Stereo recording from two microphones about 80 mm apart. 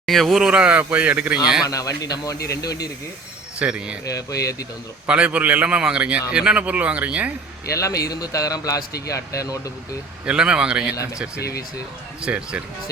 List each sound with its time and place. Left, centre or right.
0.0 s a man's voice: centre
1.6 s speech: left
3.6 s a man's voice: centre
4.0 s speech: left
5.0 s a man's voice: centre
7.7 s speech: left
10.2 s a man's voice: centre
12.2 s a man's voice: centre